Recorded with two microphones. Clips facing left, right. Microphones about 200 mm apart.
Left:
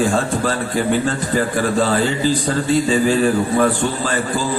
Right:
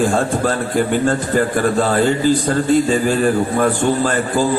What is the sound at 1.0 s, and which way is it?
A man's voice, 50° right (ahead or behind).